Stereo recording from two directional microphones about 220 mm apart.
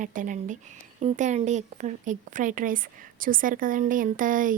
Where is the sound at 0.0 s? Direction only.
35° right (ahead or behind).